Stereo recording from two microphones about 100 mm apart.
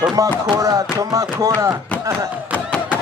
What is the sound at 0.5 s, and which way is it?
Speech, 35° right (ahead or behind).